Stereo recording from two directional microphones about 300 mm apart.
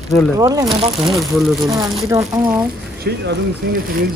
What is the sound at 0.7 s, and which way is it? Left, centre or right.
Speech, centre.